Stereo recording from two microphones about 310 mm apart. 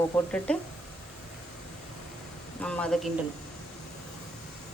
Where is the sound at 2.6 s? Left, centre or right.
Centre.